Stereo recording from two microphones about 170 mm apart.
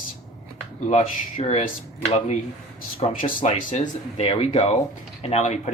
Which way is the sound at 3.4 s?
35° left (ahead or behind).